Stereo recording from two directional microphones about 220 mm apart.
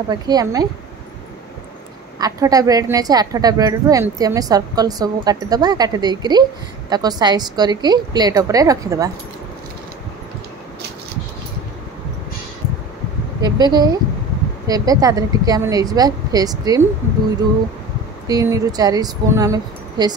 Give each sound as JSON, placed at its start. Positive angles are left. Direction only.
{"t": 0.1, "sound": "a woman's voice", "side_deg": -15}
{"t": 2.1, "sound": "a woman's voice", "side_deg": -15}
{"t": 13.4, "sound": "a woman's voice", "side_deg": -20}
{"t": 18.2, "sound": "a woman's voice", "side_deg": -15}